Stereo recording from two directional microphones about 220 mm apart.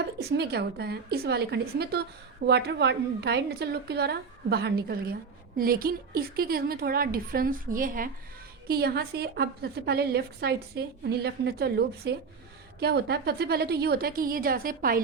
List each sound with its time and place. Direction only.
0.2 s a woman's voice: 45° right (ahead or behind)